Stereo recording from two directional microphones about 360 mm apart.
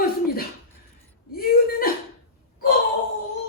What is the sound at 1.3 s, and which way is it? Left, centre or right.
Chuckle, left.